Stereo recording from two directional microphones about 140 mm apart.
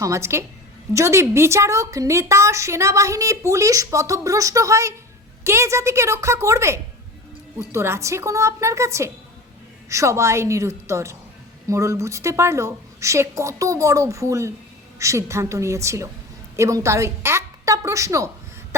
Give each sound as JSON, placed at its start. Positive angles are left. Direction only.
{"t": 0.0, "sound": "a woman's voice", "side_deg": -20}